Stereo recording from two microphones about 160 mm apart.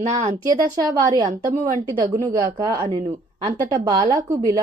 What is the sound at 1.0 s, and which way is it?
Speech, 25° right (ahead or behind).